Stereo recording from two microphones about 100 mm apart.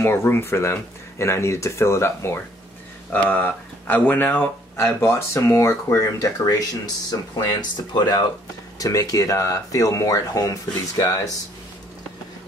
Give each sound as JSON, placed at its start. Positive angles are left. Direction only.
{"t": 0.0, "sound": "speech", "side_deg": 25}